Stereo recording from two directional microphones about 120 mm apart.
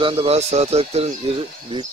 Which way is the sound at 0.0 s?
50° right (ahead or behind).